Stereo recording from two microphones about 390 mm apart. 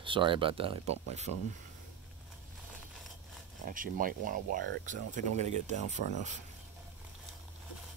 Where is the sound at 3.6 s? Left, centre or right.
Right.